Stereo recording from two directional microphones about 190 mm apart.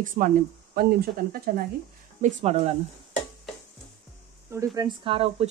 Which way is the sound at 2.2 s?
40° right (ahead or behind).